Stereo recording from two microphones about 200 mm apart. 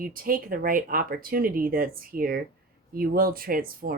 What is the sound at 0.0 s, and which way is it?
Speech, 45° right (ahead or behind).